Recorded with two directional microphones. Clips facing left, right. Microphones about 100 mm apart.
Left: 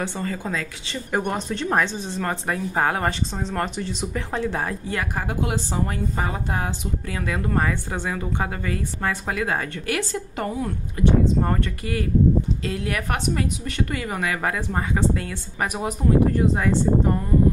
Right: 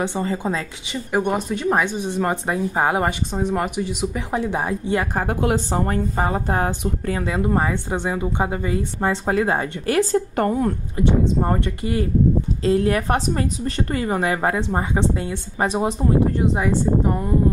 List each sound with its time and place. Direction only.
0.0 s a woman's voice: 20° right (ahead or behind)
1.1 s speech: 5° right (ahead or behind)
5.1 s a woman's voice: 50° right (ahead or behind)
7.2 s a woman's voice: 25° right (ahead or behind)
10.3 s a woman's voice: 50° right (ahead or behind)
11.0 s a woman's voice: 20° right (ahead or behind)